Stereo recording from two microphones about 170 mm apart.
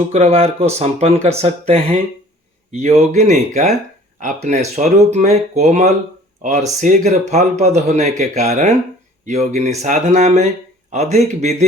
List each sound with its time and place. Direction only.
0.1 s speech: 40° right (ahead or behind)